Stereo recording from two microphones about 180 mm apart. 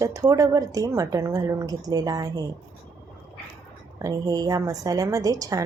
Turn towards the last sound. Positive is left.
turn(degrees=-20)  # may be behind; listen again after turning